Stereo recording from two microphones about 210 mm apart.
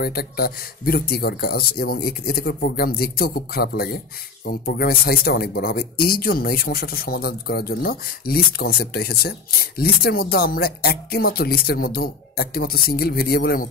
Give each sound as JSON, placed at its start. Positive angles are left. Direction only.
{"t": 0.0, "sound": "speech", "side_deg": 45}